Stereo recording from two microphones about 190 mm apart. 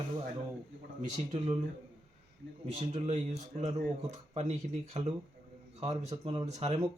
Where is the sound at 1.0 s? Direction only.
35° right (ahead or behind).